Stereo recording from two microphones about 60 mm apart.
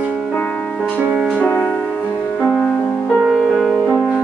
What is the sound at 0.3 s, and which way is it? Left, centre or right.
Music, centre.